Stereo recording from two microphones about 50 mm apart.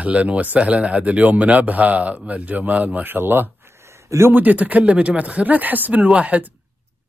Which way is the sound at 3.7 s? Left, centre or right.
Right.